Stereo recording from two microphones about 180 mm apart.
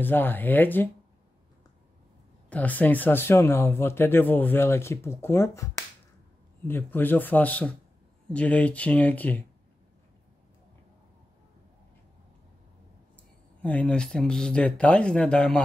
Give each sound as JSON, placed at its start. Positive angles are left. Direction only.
{"t": 0.0, "sound": "speech", "side_deg": 10}
{"t": 2.5, "sound": "speech", "side_deg": 10}
{"t": 13.6, "sound": "speech", "side_deg": 10}